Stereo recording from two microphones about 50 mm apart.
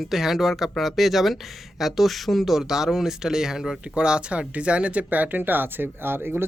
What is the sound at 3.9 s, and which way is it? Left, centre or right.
Speech, centre.